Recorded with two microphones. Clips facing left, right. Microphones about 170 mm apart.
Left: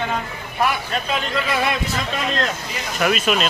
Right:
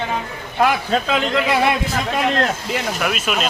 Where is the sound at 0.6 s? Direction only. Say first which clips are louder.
Right 5 dB; 90° right.